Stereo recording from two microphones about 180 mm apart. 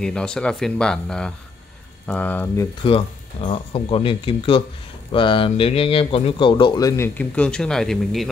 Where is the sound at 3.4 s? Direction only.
30° left (ahead or behind).